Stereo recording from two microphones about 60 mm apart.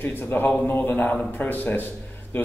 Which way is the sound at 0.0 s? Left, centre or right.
Left.